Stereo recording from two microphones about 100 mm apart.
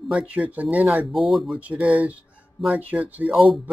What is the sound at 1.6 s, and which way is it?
Speech, 15° right (ahead or behind).